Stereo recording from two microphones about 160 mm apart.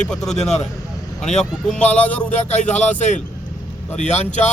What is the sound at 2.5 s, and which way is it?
Speech, 45° left (ahead or behind).